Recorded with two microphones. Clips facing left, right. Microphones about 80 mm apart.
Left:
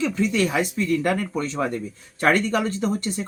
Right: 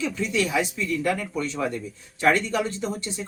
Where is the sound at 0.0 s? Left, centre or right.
Left.